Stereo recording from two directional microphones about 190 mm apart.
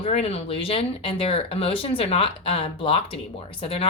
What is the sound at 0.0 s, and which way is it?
Speech, 30° left (ahead or behind).